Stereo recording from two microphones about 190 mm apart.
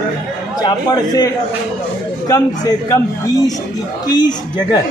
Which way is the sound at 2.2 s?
20° left (ahead or behind).